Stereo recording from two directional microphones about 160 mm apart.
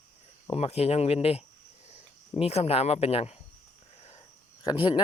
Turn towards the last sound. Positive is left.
turn(degrees=30)  # may be behind; listen again after turning